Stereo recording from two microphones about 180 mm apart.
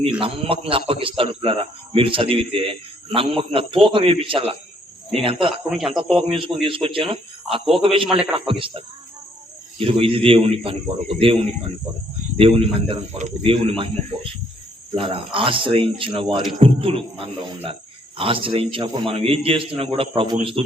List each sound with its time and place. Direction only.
0.0 s a man's voice: 30° right (ahead or behind)
5.6 s speech: centre (ahead or behind)
6.3 s a man's voice: 30° right (ahead or behind)
12.4 s a man's voice: 30° right (ahead or behind)
14.9 s a man's voice: 30° right (ahead or behind)